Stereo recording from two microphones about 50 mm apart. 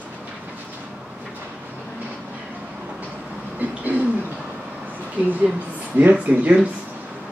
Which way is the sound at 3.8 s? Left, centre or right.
Right.